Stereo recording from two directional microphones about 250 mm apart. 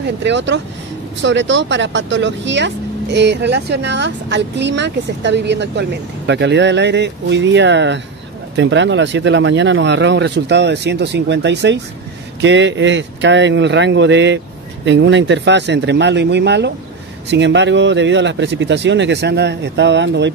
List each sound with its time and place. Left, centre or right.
0.2 s speech: right